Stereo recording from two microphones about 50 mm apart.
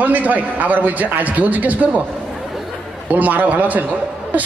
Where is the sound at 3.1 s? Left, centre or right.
Right.